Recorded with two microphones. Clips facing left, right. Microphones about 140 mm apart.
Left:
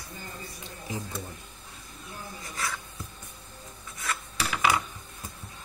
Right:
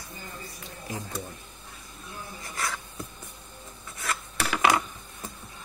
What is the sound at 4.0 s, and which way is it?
Filing, 60° right (ahead or behind).